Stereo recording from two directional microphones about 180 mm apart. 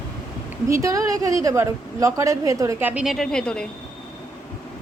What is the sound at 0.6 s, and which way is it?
A woman's voice, 15° right (ahead or behind).